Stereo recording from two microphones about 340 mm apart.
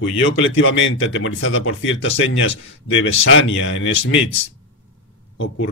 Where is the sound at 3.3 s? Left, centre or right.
Left.